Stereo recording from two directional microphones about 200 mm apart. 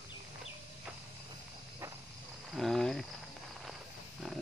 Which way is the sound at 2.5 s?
Centre (ahead or behind).